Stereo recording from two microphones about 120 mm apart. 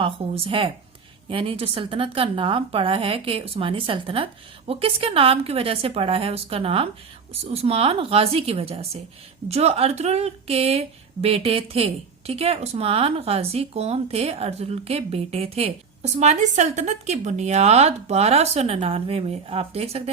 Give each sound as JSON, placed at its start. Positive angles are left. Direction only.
{"t": 0.0, "sound": "a woman's voice", "side_deg": -50}